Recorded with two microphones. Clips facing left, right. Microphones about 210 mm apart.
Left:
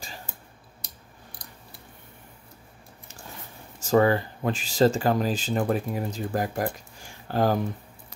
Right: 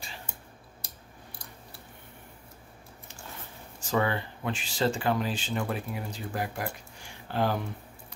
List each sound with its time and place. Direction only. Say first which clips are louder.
3.8 s speech: left 8 dB; 40° left (ahead or behind)